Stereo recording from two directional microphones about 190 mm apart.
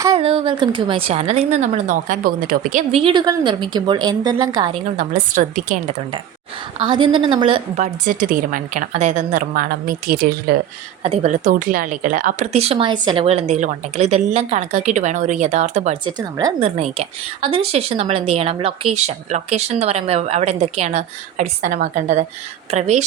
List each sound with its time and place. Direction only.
0.2 s speech: 30° right (ahead or behind)
3.0 s a woman's voice: 25° right (ahead or behind)
4.9 s speech: 40° right (ahead or behind)
6.7 s a woman's voice: 25° right (ahead or behind)
8.0 s a woman's voice: 45° right (ahead or behind)
11.0 s speech: 35° right (ahead or behind)
16.0 s a woman's voice: 20° right (ahead or behind)
16.6 s speech: 35° right (ahead or behind)